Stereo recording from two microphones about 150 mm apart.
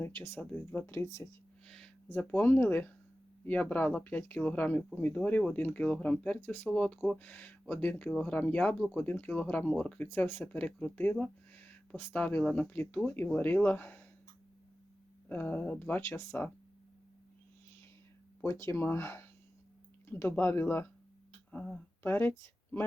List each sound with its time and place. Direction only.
0.0 s speech: 15° left (ahead or behind)
1.6 s a sound: 5° left (ahead or behind)
2.0 s speech: 15° left (ahead or behind)
15.3 s speech: 10° left (ahead or behind)
18.6 s speech: 15° left (ahead or behind)